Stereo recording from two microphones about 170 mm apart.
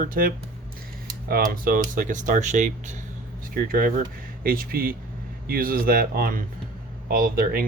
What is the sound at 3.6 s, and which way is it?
Speech, 60° right (ahead or behind).